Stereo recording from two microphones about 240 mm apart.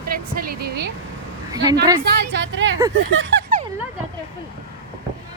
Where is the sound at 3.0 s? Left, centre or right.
Right.